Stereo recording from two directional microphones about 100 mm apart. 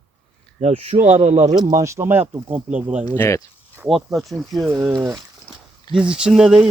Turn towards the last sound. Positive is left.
turn(degrees=-10)  # may be behind; listen again after turning